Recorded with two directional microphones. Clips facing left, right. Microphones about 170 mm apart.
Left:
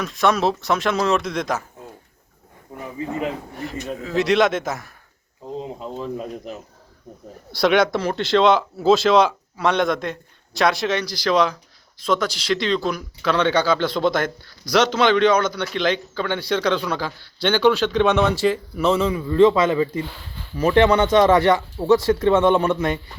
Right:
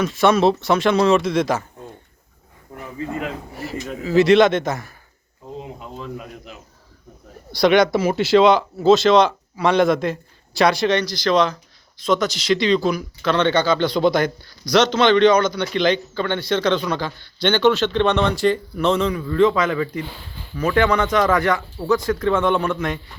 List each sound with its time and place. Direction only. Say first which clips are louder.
0.0 s speech: right 4 dB; centre (ahead or behind)
2.8 s speech: left 1 dB; 20° left (ahead or behind)
3.5 s speech: even; 5° right (ahead or behind)
5.5 s speech: left 4 dB; 30° left (ahead or behind)
7.5 s speech: right 2 dB; centre (ahead or behind)
19.3 s speech: left 3 dB; 25° left (ahead or behind)